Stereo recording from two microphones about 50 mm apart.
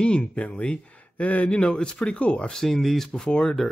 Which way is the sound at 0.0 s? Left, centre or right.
Left.